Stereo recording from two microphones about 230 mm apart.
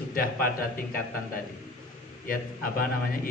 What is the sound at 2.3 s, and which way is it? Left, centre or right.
A man's voice, left.